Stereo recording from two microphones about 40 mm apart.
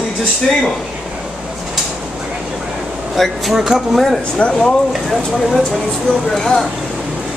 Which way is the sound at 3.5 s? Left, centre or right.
Centre.